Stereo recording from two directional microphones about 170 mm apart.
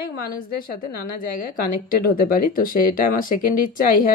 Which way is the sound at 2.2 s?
55° left (ahead or behind).